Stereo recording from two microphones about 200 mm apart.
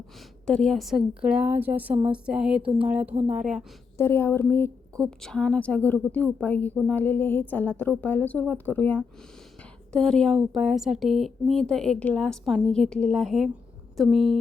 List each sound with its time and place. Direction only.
0.4 s a woman's voice: 5° left (ahead or behind)
3.9 s a woman's voice: 15° left (ahead or behind)